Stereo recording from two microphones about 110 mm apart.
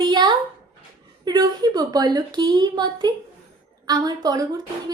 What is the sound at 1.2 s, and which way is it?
A woman's voice, 40° right (ahead or behind).